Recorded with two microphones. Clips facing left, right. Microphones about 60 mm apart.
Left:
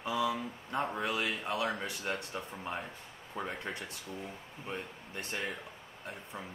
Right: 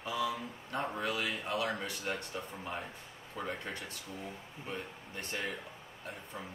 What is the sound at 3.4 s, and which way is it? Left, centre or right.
Speech, centre.